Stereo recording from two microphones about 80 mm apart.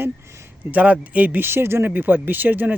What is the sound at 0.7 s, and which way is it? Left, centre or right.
Speech, centre.